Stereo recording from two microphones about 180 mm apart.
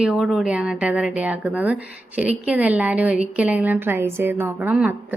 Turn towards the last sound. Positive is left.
turn(degrees=-10)  # may be behind; listen again after turning